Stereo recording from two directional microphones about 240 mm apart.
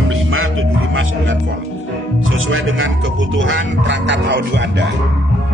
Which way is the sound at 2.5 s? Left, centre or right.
Right.